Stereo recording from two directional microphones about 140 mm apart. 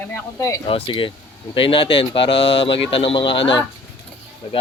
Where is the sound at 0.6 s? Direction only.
40° left (ahead or behind).